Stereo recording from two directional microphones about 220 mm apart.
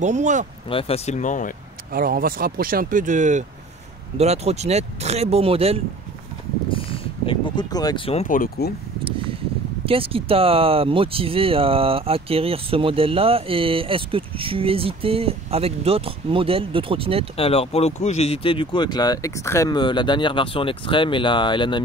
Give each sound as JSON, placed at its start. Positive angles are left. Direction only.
{"t": 0.0, "sound": "speech", "side_deg": -35}
{"t": 0.7, "sound": "speech", "side_deg": 25}
{"t": 1.9, "sound": "speech", "side_deg": -40}
{"t": 6.7, "sound": "a sound", "side_deg": 25}
{"t": 9.8, "sound": "speech", "side_deg": -25}
{"t": 17.4, "sound": "speech", "side_deg": 25}